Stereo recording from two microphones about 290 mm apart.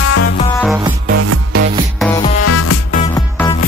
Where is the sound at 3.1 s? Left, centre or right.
Centre.